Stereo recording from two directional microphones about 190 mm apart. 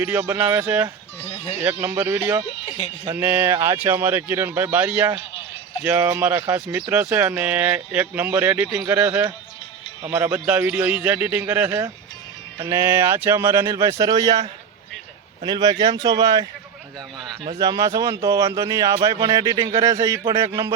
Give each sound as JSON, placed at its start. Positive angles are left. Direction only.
{"t": 0.0, "sound": "speech", "side_deg": -10}
{"t": 1.2, "sound": "speech", "side_deg": 30}
{"t": 1.8, "sound": "speech", "side_deg": -10}
{"t": 2.5, "sound": "a sound", "side_deg": 35}
{"t": 3.1, "sound": "speech", "side_deg": -10}
{"t": 15.4, "sound": "speech", "side_deg": -25}